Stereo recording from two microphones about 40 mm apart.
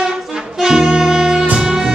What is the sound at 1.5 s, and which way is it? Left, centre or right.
Music, centre.